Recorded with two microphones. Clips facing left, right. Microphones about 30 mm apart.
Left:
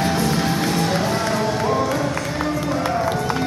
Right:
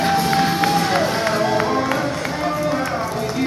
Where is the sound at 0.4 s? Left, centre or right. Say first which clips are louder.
Right 3 dB; right.